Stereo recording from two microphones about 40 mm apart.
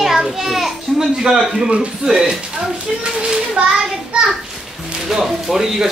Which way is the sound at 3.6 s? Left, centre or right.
Right.